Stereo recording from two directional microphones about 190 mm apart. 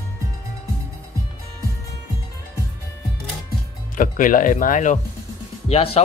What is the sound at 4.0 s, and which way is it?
Speech, 45° left (ahead or behind).